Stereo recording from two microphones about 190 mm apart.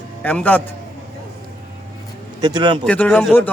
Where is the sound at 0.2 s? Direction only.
5° left (ahead or behind).